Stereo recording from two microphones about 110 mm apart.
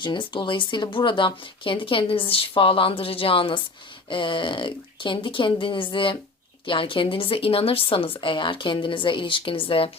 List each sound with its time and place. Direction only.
0.0 s speech: 45° left (ahead or behind)